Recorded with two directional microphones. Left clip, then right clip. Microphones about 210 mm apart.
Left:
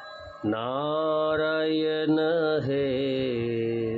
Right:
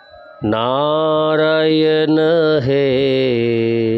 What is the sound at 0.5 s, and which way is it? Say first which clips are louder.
Mantra: right 12 dB; 45° right (ahead or behind).